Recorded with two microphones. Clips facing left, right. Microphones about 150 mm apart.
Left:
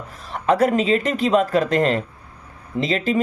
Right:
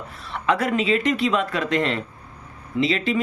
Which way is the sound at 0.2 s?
40° left (ahead or behind).